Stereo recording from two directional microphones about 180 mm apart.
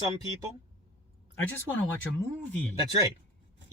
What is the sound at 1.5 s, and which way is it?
Speech, 10° left (ahead or behind).